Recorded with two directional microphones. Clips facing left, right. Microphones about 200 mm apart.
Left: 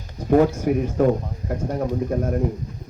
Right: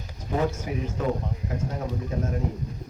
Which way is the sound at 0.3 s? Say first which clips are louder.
Left 10 dB; 55° left (ahead or behind).